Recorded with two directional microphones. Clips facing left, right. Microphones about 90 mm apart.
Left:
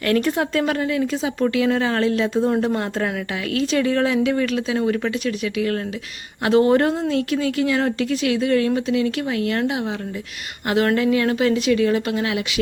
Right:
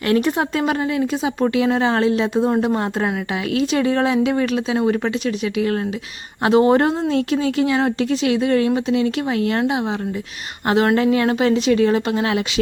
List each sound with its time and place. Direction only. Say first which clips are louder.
0.0 s a woman's voice: right 2 dB; 20° right (ahead or behind)